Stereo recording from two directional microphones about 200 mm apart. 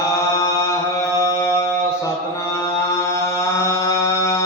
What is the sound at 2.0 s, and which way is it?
Mantra, 15° left (ahead or behind).